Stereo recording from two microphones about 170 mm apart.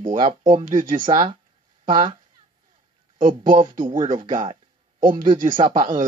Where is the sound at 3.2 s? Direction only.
30° right (ahead or behind).